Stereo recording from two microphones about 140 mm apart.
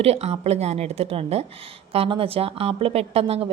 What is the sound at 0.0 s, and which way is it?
A woman's voice, 50° right (ahead or behind).